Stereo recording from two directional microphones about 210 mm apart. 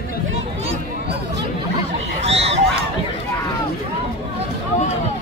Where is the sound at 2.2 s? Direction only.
30° right (ahead or behind).